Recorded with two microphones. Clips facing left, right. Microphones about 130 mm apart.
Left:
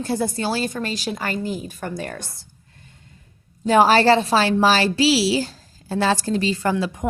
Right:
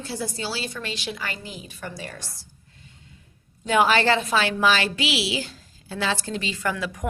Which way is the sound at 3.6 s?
35° left (ahead or behind).